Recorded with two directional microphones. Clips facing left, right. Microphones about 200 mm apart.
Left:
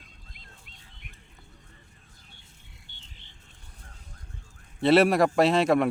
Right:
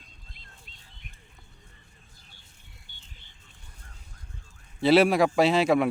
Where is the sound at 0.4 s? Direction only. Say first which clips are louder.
Left 2 dB; 30° right (ahead or behind).